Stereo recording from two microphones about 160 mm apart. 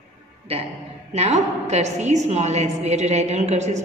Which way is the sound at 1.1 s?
45° right (ahead or behind).